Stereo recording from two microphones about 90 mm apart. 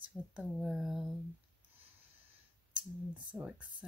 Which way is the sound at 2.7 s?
15° right (ahead or behind).